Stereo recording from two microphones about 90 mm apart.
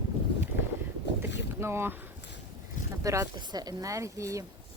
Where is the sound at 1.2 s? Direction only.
30° right (ahead or behind).